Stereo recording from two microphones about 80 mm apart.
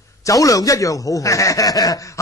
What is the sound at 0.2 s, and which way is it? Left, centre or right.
A man's voice, left.